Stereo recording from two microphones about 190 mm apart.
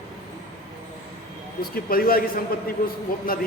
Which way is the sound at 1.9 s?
50° left (ahead or behind).